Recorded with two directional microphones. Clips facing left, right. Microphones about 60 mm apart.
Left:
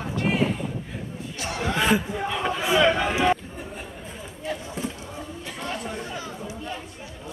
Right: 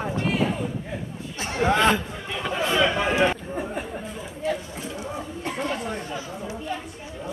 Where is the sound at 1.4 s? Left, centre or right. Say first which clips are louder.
Right 6 dB; right.